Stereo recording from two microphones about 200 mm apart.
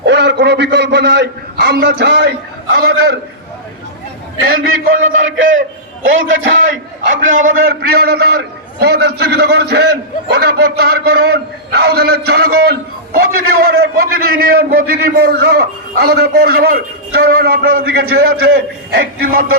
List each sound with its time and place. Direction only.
0.0 s a man's voice: 60° right (ahead or behind)
4.6 s a man's voice: 85° right
7.3 s a man's voice: 45° right (ahead or behind)